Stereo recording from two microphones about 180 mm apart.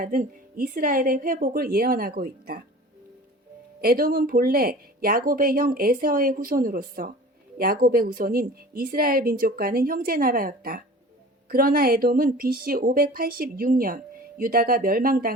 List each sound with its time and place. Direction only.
0.0 s a woman's voice: 50° right (ahead or behind)
3.8 s a woman's voice: 55° right (ahead or behind)